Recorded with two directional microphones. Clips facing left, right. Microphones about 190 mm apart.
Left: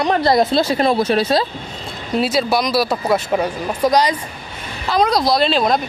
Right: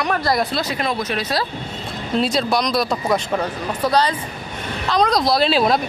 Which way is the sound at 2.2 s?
5° left (ahead or behind).